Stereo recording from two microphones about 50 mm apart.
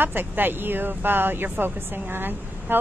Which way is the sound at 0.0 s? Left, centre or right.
Right.